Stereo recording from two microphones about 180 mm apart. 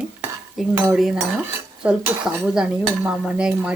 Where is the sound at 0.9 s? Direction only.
Centre (ahead or behind).